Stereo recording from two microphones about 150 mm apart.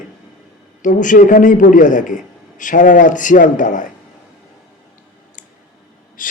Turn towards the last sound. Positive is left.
turn(degrees=65)  # may be behind; listen again after turning